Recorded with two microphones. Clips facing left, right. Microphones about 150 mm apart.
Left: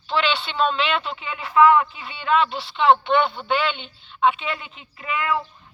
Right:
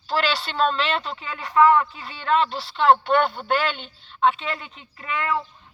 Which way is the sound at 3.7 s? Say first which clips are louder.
Left 1 dB; centre (ahead or behind).